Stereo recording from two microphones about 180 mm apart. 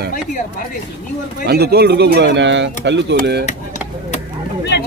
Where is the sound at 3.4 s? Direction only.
40° left (ahead or behind).